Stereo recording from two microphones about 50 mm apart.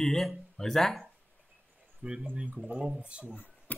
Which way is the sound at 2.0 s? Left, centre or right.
Centre.